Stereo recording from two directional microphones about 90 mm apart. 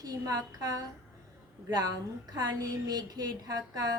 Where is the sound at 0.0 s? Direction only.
45° right (ahead or behind).